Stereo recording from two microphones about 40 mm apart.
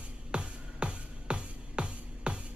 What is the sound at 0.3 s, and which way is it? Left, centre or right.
Music, right.